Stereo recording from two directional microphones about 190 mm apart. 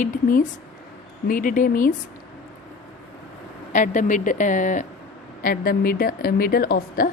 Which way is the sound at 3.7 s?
40° left (ahead or behind).